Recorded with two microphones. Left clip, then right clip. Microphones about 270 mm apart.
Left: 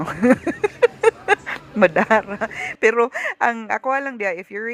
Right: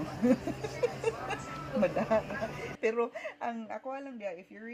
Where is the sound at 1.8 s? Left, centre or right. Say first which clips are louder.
Left 14 dB; left.